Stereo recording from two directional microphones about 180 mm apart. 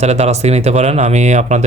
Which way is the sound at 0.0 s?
35° right (ahead or behind).